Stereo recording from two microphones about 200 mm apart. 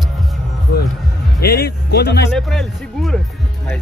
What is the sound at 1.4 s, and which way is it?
Speech, 50° left (ahead or behind).